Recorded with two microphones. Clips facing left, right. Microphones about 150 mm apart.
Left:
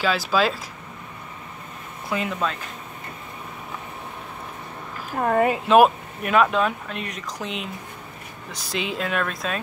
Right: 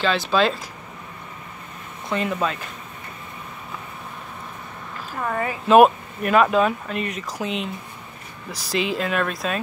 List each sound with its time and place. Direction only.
0.0 s speech: 5° left (ahead or behind)
2.0 s speech: centre (ahead or behind)
5.1 s speech: 45° left (ahead or behind)
5.7 s speech: centre (ahead or behind)